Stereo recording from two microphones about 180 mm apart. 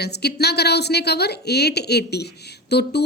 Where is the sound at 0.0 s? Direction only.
65° left (ahead or behind).